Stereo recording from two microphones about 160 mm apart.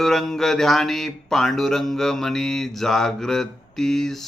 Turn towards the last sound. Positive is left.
turn(degrees=0)  # may be behind; listen again after turning